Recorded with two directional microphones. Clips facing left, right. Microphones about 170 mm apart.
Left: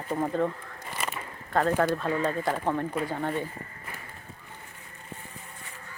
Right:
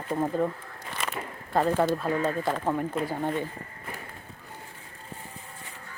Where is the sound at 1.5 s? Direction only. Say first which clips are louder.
Right 1 dB; 10° right (ahead or behind).